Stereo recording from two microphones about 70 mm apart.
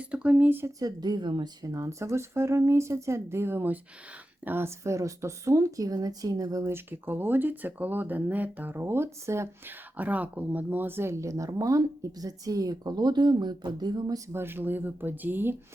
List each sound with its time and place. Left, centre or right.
0.0 s speech: centre
0.8 s speech: right
1.7 s speech: right
6.7 s speech: right
9.6 s speech: right
11.1 s speech: right
14.3 s speech: right